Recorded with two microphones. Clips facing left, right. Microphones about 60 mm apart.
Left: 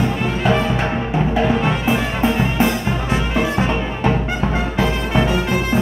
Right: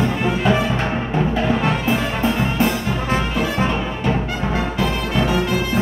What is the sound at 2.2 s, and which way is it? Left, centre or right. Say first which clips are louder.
Music: left 2 dB; left.